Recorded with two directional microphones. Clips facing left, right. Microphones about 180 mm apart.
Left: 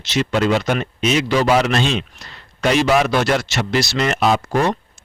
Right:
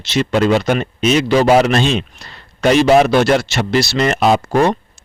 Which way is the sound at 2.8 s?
40° right (ahead or behind).